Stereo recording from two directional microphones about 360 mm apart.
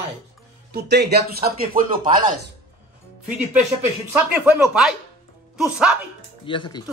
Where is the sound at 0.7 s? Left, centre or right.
Right.